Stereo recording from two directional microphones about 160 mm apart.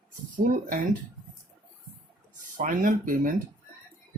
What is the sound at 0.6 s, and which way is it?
Speech, 55° right (ahead or behind).